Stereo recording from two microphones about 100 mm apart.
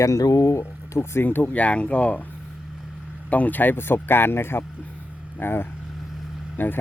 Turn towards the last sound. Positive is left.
turn(degrees=20)  # may be behind; listen again after turning